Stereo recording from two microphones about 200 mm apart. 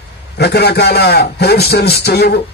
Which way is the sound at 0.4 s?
55° left (ahead or behind).